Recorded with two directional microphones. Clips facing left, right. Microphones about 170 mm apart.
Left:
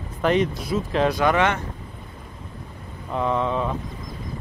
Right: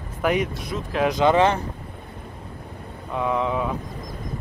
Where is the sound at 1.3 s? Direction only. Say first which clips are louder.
Right 3 dB; 30° right (ahead or behind).